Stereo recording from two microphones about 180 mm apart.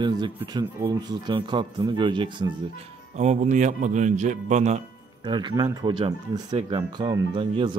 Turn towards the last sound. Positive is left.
turn(degrees=-30)  # may be behind; listen again after turning